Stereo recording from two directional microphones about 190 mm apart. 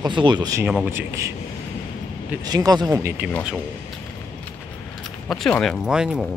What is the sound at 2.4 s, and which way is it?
Speech, 20° right (ahead or behind).